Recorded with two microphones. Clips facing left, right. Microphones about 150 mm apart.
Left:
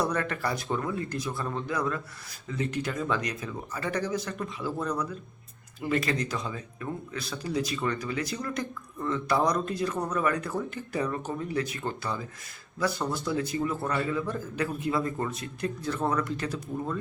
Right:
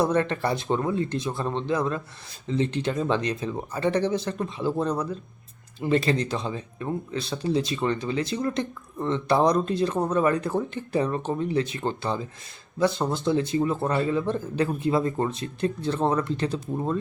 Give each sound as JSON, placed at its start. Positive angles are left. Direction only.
{"t": 0.0, "sound": "speech", "side_deg": -25}